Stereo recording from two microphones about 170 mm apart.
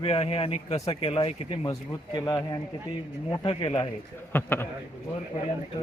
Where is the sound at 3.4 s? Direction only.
30° left (ahead or behind).